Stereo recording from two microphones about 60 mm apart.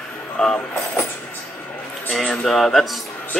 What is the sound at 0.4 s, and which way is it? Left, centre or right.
Speech, centre.